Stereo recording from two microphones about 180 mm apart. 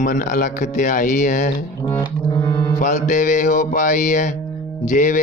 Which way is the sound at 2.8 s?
45° left (ahead or behind).